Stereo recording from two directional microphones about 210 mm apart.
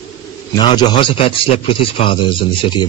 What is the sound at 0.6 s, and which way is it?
A man's voice, 25° left (ahead or behind).